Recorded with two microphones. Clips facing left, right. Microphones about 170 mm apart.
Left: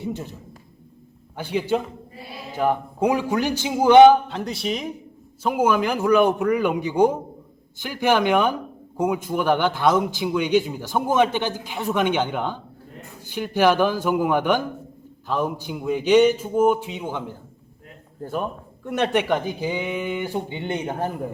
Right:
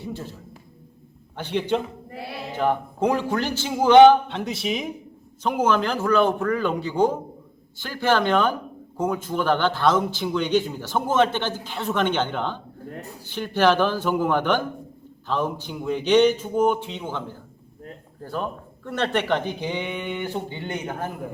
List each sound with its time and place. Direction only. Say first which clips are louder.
0.0 s a man's voice: left 3 dB; 20° left (ahead or behind)
1.4 s a man's voice: left 1 dB; 10° left (ahead or behind)
2.1 s choir: right 7 dB; 70° right (ahead or behind)
2.6 s a man's voice: left 1 dB; 10° left (ahead or behind); by 21.1 s 30° left (ahead or behind)